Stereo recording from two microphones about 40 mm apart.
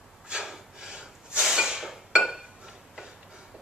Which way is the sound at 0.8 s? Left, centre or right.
Right.